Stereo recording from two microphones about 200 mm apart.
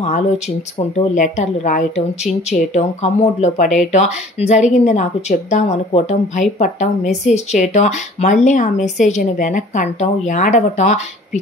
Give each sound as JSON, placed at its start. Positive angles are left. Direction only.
{"t": 0.7, "sound": "speech", "side_deg": 40}